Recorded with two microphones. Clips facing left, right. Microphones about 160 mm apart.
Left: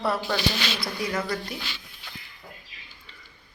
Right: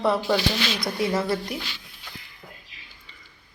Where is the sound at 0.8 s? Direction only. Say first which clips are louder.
Right 5 dB; 25° right (ahead or behind).